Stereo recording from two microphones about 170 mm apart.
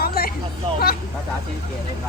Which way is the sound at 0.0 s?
65° left (ahead or behind).